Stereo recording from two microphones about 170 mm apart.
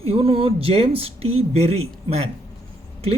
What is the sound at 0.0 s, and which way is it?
Speech, 35° right (ahead or behind).